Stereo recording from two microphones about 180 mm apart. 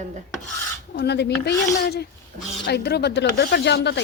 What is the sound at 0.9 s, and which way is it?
Speech, 70° left (ahead or behind).